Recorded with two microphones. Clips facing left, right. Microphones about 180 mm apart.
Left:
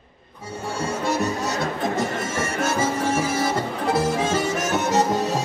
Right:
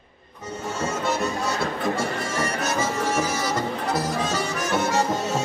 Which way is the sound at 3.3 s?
50° left (ahead or behind).